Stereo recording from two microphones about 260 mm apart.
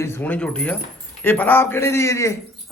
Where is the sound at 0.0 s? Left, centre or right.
Centre.